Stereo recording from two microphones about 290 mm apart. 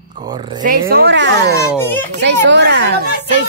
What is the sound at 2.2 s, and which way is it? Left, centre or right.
Speech, right.